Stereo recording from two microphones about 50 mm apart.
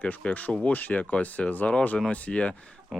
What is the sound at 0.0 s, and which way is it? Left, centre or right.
Speech, left.